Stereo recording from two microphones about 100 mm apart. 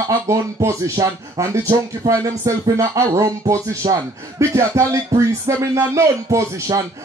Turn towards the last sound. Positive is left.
turn(degrees=-30)  # may be behind; listen again after turning